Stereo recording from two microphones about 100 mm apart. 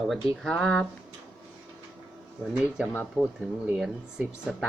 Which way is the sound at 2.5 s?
10° right (ahead or behind).